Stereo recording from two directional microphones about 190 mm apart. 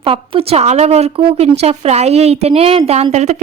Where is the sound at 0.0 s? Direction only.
30° right (ahead or behind).